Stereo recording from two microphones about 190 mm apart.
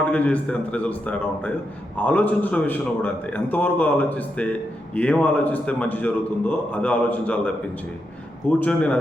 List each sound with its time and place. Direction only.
0.0 s a man's voice: 10° left (ahead or behind)